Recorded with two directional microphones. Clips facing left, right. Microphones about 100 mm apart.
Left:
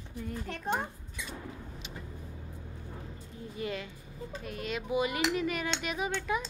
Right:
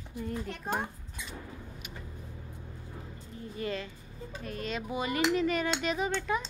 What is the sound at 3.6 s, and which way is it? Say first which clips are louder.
Music: right 1 dB; 10° left (ahead or behind).